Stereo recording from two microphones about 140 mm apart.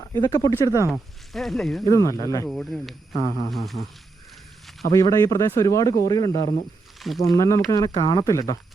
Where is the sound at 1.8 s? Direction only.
20° left (ahead or behind).